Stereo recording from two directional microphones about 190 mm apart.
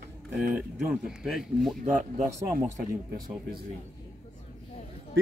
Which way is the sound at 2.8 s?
50° right (ahead or behind).